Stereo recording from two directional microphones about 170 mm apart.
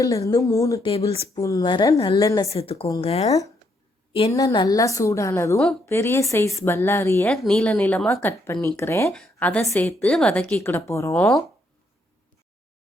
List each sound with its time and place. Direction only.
0.0 s a woman's voice: 20° left (ahead or behind)
0.8 s speech: 35° left (ahead or behind)
1.4 s a woman's voice: 20° left (ahead or behind)
2.5 s speech: 35° left (ahead or behind)
4.3 s a woman's voice: 20° left (ahead or behind)
5.5 s a woman's voice: 5° left (ahead or behind)
5.9 s a woman's voice: 15° left (ahead or behind)
11.1 s a woman's voice: 5° left (ahead or behind)